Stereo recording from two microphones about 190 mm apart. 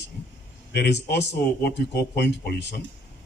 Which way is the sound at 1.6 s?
55° left (ahead or behind).